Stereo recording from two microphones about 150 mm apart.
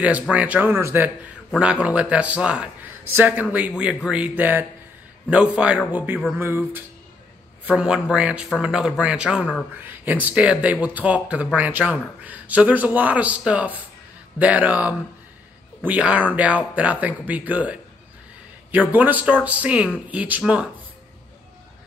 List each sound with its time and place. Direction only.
0.0 s a man's voice: 10° right (ahead or behind)
7.7 s a man's voice: 5° right (ahead or behind)